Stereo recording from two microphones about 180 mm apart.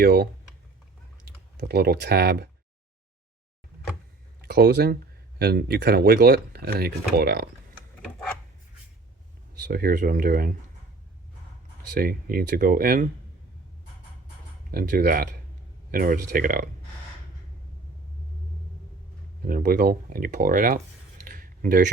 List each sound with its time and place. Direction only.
0.0 s speech: 55° right (ahead or behind)
1.6 s speech: 60° right (ahead or behind)
4.4 s speech: 60° right (ahead or behind)
9.6 s speech: 55° right (ahead or behind)
11.9 s speech: 55° right (ahead or behind)
14.7 s speech: 55° right (ahead or behind)
19.5 s speech: 50° right (ahead or behind)
21.2 s a sound: 50° right (ahead or behind)